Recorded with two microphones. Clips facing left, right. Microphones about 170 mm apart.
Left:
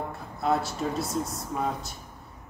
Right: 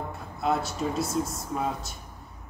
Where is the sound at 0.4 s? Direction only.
Centre (ahead or behind).